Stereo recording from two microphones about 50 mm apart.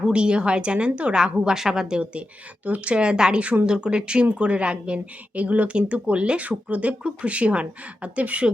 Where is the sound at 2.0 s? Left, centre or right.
Right.